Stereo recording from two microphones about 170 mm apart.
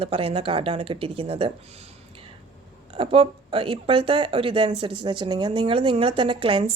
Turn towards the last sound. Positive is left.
turn(degrees=-30)  # may be behind; listen again after turning